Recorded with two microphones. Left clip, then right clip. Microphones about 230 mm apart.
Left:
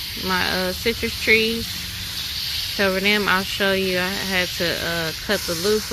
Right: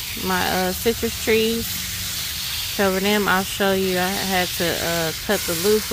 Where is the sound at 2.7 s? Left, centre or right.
Centre.